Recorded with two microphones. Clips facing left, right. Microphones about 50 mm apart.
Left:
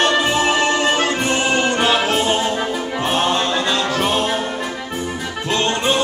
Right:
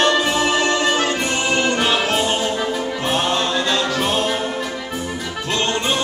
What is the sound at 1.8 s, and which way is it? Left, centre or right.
Music, centre.